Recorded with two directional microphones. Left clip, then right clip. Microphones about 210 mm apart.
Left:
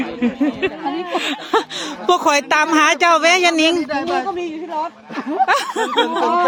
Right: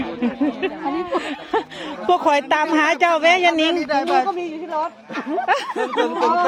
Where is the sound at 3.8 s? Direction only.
40° right (ahead or behind).